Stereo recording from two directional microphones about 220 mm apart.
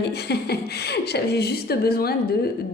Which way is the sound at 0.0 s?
50° left (ahead or behind).